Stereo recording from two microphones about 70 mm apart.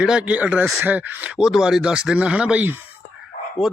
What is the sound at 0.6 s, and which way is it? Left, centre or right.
Speech, centre.